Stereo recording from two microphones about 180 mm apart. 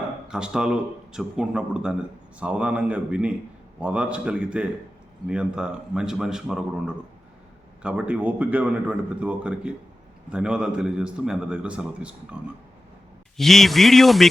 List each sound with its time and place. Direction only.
0.3 s a man's voice: 5° right (ahead or behind)